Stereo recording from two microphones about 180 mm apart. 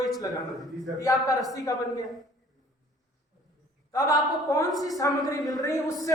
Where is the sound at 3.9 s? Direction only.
20° left (ahead or behind).